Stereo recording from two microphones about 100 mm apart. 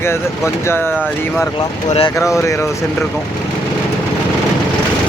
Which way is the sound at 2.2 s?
30° left (ahead or behind).